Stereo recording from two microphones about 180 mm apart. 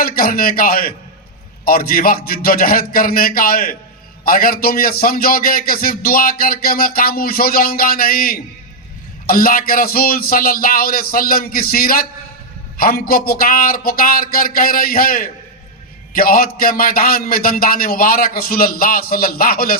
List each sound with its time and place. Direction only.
0.0 s a man's voice: 55° left (ahead or behind)